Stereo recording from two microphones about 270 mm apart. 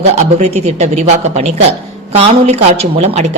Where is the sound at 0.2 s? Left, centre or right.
Right.